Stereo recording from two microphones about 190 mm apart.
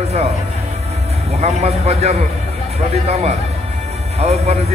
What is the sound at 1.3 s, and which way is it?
A man's voice, 35° right (ahead or behind).